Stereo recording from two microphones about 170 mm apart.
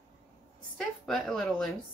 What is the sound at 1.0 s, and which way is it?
Speech, 5° left (ahead or behind).